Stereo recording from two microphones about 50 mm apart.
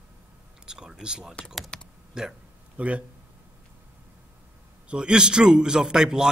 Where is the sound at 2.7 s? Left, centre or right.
Right.